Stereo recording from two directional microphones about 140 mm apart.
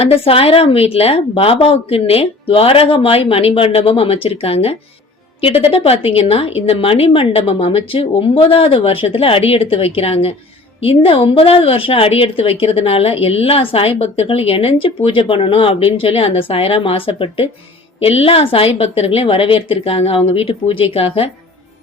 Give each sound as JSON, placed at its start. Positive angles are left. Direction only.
{"t": 0.0, "sound": "a woman's voice", "side_deg": 40}